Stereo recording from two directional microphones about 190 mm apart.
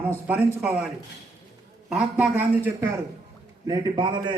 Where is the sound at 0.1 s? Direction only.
10° right (ahead or behind).